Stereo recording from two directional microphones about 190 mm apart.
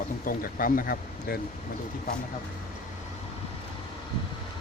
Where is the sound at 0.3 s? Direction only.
45° left (ahead or behind).